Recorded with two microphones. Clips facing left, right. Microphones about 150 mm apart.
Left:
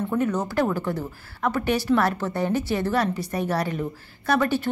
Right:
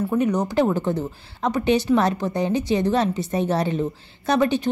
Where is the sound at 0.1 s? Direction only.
15° right (ahead or behind).